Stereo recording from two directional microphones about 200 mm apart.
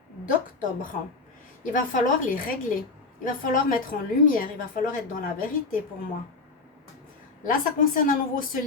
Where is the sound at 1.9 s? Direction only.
40° left (ahead or behind).